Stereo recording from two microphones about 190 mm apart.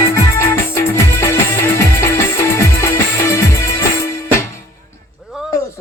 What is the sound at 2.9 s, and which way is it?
Music, 15° left (ahead or behind).